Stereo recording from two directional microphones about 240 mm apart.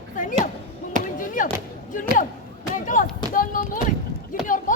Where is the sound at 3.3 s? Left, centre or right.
Left.